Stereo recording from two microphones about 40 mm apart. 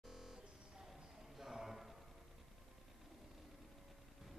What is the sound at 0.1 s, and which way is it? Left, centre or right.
Music, centre.